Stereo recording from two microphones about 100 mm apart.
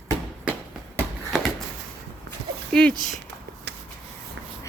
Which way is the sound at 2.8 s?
5° left (ahead or behind).